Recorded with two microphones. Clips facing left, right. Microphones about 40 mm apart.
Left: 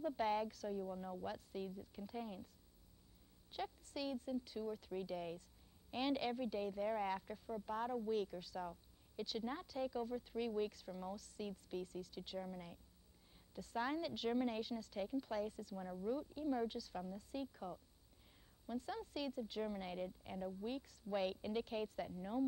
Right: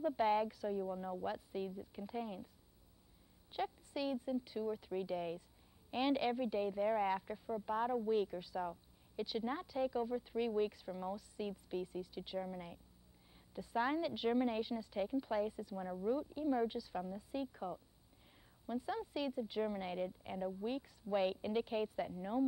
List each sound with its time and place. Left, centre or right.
0.0 s a woman's voice: centre
3.5 s a woman's voice: centre